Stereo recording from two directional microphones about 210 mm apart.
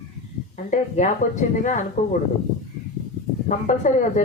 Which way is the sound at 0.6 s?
35° left (ahead or behind).